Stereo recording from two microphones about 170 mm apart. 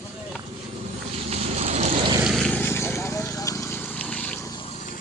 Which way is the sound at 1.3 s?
40° right (ahead or behind).